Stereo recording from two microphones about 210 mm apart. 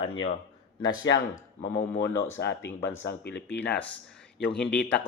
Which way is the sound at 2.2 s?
60° left (ahead or behind).